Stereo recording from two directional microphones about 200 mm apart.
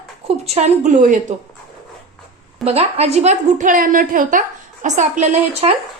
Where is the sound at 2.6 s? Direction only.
30° right (ahead or behind).